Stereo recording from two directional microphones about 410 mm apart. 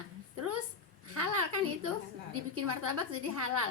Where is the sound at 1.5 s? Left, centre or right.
Right.